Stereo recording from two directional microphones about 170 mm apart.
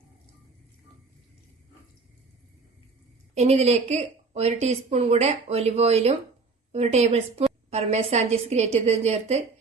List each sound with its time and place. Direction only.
3.3 s speech: 40° right (ahead or behind)